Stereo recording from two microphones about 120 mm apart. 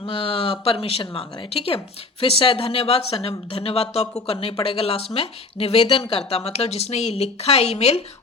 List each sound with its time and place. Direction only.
0.0 s a woman's voice: 50° left (ahead or behind)